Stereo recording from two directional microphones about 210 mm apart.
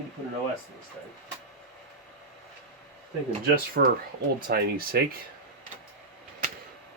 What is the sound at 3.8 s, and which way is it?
Speech, 50° right (ahead or behind).